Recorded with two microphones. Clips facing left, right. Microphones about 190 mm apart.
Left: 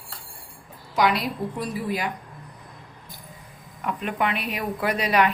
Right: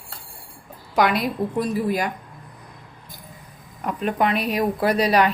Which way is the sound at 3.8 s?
40° right (ahead or behind).